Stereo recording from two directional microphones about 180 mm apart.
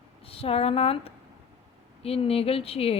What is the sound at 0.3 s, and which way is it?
A woman's voice, 30° left (ahead or behind).